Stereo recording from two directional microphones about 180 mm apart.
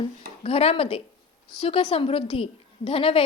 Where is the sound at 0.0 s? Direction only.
30° left (ahead or behind).